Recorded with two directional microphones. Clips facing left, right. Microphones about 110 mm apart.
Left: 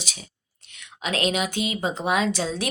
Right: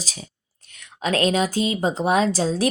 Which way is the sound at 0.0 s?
35° right (ahead or behind).